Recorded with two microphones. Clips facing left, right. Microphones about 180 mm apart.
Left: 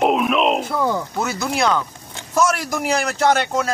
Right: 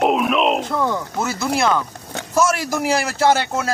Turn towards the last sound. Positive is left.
turn(degrees=-5)  # may be behind; listen again after turning